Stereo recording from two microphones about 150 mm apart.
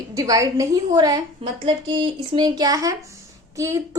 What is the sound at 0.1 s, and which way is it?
Speech, 25° right (ahead or behind).